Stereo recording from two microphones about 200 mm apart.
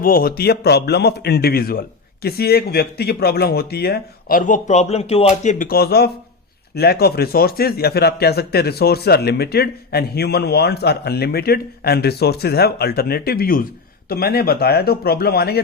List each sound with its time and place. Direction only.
0.0 s speech: 45° left (ahead or behind)